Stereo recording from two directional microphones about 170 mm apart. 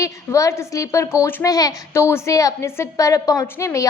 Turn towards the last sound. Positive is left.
turn(degrees=20)  # may be behind; listen again after turning